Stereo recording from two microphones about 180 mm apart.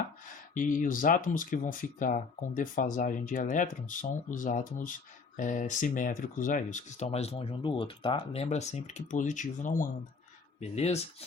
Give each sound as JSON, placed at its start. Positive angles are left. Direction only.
{"t": 0.5, "sound": "speech", "side_deg": 45}